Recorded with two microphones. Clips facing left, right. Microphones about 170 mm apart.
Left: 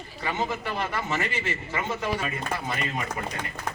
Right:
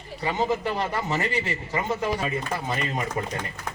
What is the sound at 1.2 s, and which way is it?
A man's voice, 35° right (ahead or behind).